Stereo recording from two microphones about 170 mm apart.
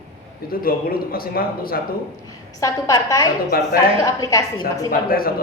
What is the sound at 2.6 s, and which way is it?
Speech, 20° left (ahead or behind).